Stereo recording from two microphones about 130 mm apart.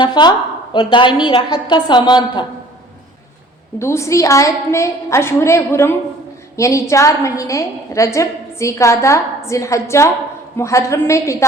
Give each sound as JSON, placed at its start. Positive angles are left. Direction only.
{"t": 0.0, "sound": "a woman's voice", "side_deg": 35}
{"t": 3.8, "sound": "a woman's voice", "side_deg": 20}